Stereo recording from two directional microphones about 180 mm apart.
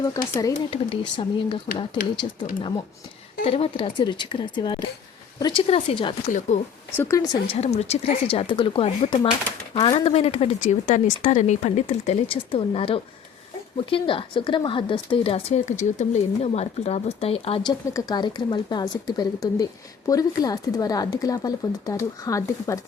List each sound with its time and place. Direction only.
0.0 s speech: 20° left (ahead or behind)
0.7 s speech: 30° left (ahead or behind)
6.5 s speech: 40° left (ahead or behind)
6.9 s speech: 15° left (ahead or behind)
7.6 s speech: 35° left (ahead or behind); by 22.8 s 15° left (ahead or behind)